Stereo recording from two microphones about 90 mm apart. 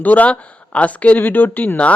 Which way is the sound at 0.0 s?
15° left (ahead or behind).